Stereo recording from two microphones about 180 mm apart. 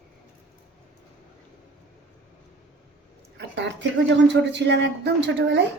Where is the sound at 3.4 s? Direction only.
75° right (ahead or behind).